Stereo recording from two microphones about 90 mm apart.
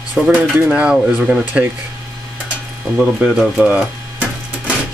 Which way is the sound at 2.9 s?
10° right (ahead or behind).